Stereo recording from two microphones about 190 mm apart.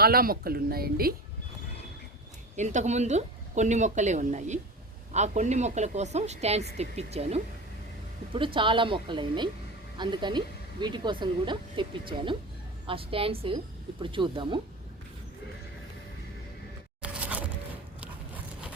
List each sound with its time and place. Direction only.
0.0 s a woman's voice: 50° right (ahead or behind)
2.6 s speech: 40° right (ahead or behind)
17.0 s a sound: 5° right (ahead or behind)